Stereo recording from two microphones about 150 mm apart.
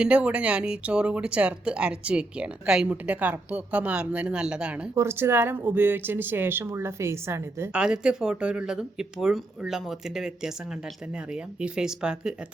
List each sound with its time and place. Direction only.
0.0 s speech: 10° right (ahead or behind)
7.7 s speech: 5° right (ahead or behind)
11.6 s speech: 5° right (ahead or behind)